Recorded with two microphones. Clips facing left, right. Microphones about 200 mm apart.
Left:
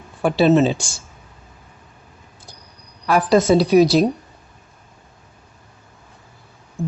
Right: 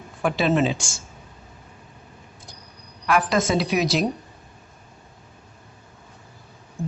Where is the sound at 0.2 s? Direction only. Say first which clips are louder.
Left 6 dB; 35° left (ahead or behind).